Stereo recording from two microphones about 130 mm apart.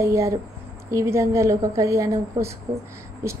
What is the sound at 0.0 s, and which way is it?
A woman's voice, 25° right (ahead or behind).